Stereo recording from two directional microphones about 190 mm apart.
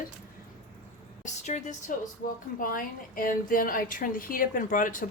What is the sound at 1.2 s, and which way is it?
A woman's voice, 40° left (ahead or behind).